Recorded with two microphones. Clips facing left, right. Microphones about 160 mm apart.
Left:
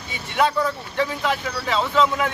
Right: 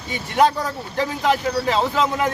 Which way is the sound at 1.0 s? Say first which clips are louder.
Right 3 dB; 40° right (ahead or behind).